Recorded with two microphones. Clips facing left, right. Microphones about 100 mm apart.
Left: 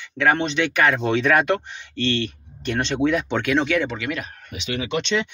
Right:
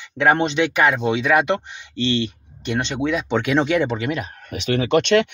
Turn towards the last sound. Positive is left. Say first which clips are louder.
# right 7 dB
turn(degrees=-55)  # may be behind; listen again after turning